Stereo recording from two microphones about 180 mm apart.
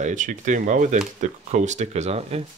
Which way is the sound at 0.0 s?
45° right (ahead or behind).